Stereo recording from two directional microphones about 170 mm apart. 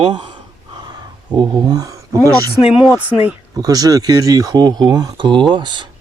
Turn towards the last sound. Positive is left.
turn(degrees=-25)  # may be behind; listen again after turning